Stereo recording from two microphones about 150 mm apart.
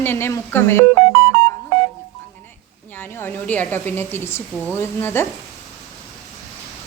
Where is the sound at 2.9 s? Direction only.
10° left (ahead or behind).